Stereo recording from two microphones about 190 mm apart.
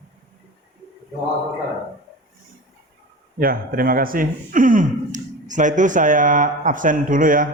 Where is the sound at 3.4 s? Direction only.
50° right (ahead or behind).